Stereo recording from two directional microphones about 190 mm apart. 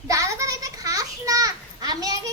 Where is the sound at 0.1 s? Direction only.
15° right (ahead or behind).